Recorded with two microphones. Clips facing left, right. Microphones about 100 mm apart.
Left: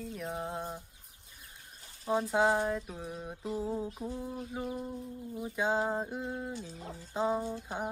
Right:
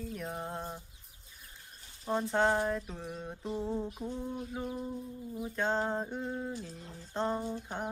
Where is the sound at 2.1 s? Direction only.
5° left (ahead or behind).